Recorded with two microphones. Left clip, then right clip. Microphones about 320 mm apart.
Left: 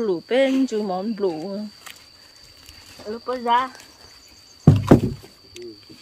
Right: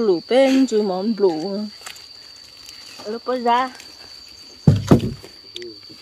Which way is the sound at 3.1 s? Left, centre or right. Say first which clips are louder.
Right 2 dB; centre.